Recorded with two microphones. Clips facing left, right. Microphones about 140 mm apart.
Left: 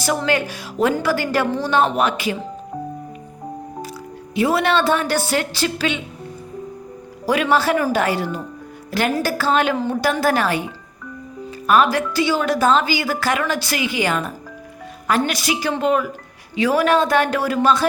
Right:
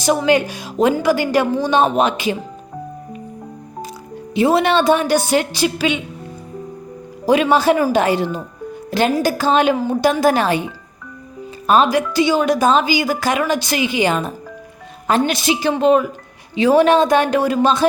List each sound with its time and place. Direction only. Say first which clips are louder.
0.3 s a woman's voice: right 5 dB; 20° right (ahead or behind)
4.4 s a woman's voice: right 3 dB; 25° right (ahead or behind)
7.4 s a woman's voice: right 3 dB; 15° right (ahead or behind)
8.9 s music: right 4 dB; 20° right (ahead or behind)
9.1 s a woman's voice: right 2 dB; 20° right (ahead or behind)
9.7 s a woman's voice: right 2 dB; 5° right (ahead or behind)
10.0 s a woman's voice: right 4 dB; 20° right (ahead or behind)